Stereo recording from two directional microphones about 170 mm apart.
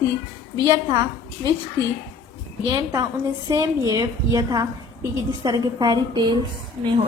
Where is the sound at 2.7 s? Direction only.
20° right (ahead or behind).